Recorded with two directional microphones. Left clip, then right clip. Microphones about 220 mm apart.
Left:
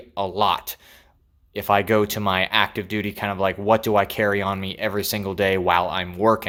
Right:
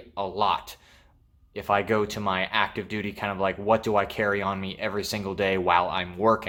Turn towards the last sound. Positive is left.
turn(degrees=25)  # may be behind; listen again after turning